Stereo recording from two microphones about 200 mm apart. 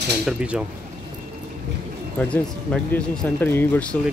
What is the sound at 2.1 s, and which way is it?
Speech, 5° left (ahead or behind).